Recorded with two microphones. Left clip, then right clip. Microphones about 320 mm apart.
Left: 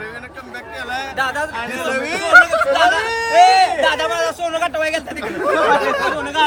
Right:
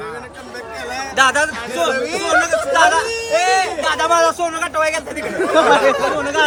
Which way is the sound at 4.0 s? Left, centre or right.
Centre.